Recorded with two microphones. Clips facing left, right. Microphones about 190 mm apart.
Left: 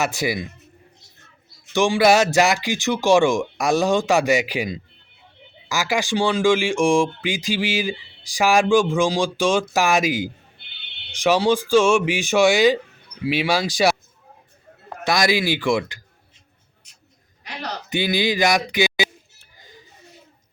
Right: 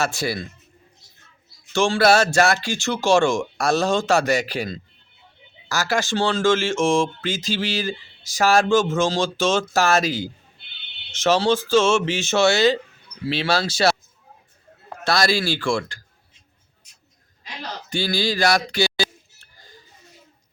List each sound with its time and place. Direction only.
0.0 s speech: 15° left (ahead or behind)
1.7 s speech: 15° left (ahead or behind)
15.0 s speech: 15° left (ahead or behind)
17.8 s a sound: 20° left (ahead or behind)